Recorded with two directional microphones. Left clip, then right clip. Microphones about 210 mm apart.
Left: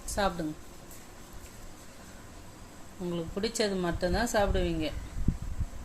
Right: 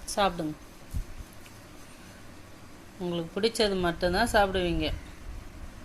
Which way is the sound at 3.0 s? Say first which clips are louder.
Right 5 dB; 5° right (ahead or behind).